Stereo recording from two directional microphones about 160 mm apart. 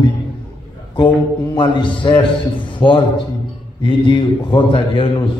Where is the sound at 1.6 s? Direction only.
30° left (ahead or behind).